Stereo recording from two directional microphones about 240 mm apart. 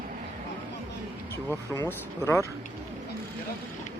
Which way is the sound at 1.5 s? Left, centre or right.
Centre.